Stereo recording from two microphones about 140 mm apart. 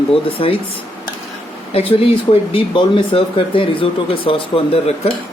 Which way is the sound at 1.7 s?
45° left (ahead or behind).